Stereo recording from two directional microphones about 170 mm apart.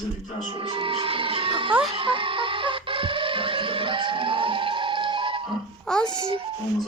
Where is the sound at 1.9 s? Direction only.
30° right (ahead or behind).